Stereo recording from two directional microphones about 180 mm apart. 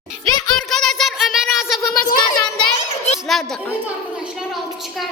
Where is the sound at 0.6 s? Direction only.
Centre (ahead or behind).